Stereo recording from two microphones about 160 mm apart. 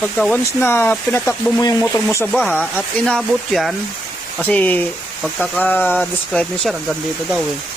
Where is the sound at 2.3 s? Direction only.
Centre (ahead or behind).